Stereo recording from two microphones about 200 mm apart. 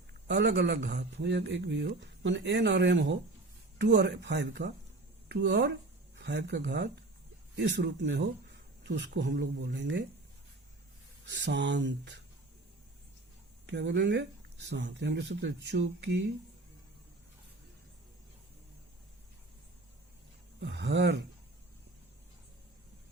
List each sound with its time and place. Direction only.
0.3 s speech: 60° right (ahead or behind)
11.3 s speech: 60° right (ahead or behind)
13.7 s speech: 60° right (ahead or behind)
20.6 s speech: 55° right (ahead or behind)